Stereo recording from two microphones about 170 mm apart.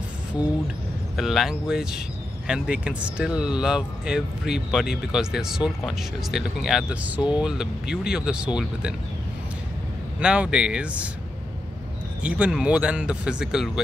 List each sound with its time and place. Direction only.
0.4 s speech: 20° left (ahead or behind)
1.1 s speech: centre (ahead or behind)
10.2 s speech: 5° right (ahead or behind)
12.2 s speech: 5° right (ahead or behind)